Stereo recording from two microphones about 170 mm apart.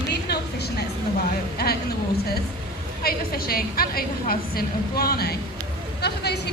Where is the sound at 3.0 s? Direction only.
60° left (ahead or behind).